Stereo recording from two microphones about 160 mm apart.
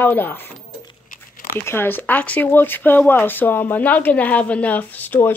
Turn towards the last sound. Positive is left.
turn(degrees=10)  # may be behind; listen again after turning